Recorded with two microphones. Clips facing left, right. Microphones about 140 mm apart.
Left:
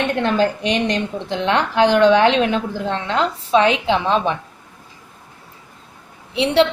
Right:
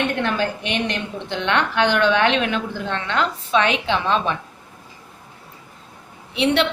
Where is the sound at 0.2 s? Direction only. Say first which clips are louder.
Left 5 dB; 30° left (ahead or behind).